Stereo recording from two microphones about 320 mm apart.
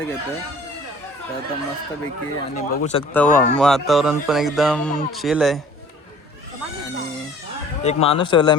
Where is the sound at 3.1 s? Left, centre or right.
Centre.